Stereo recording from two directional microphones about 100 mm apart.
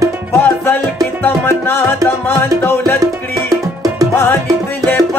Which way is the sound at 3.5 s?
35° right (ahead or behind).